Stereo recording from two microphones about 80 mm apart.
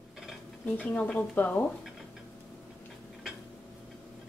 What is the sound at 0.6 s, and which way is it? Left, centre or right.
A woman's voice, centre.